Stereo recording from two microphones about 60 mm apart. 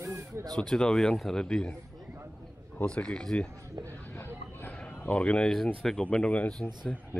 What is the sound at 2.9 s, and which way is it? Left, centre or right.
Speech, centre.